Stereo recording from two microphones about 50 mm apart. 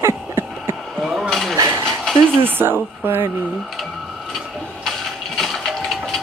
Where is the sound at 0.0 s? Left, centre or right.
Right.